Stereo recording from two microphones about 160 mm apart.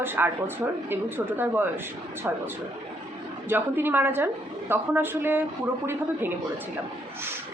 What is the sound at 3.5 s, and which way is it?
A woman's voice, 15° right (ahead or behind).